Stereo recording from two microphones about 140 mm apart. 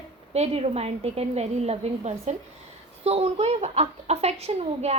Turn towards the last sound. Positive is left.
turn(degrees=-50)  # may be behind; listen again after turning